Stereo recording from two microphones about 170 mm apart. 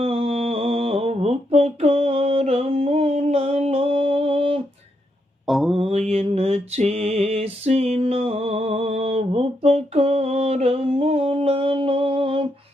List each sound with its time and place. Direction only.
0.0 s mantra: 35° right (ahead or behind)
5.5 s mantra: centre (ahead or behind)
5.7 s mantra: 40° right (ahead or behind)